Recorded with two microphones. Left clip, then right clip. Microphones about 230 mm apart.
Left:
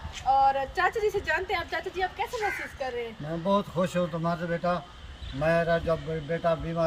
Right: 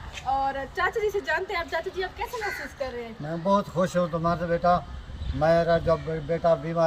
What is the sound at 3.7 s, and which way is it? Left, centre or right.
A man's voice, centre.